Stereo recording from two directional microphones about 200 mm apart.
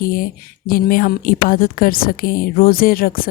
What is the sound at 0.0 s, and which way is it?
A woman's voice, 45° left (ahead or behind).